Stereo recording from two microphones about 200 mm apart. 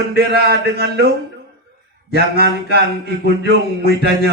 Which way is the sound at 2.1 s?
55° right (ahead or behind).